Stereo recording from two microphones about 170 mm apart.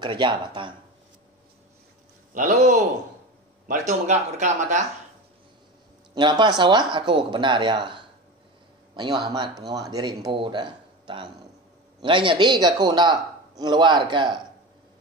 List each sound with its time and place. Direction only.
0.0 s a man's voice: 25° right (ahead or behind)
2.3 s speech: 45° right (ahead or behind)
6.1 s a man's voice: 25° right (ahead or behind)